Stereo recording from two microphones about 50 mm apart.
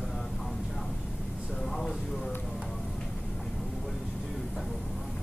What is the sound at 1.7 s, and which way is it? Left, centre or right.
Speech, centre.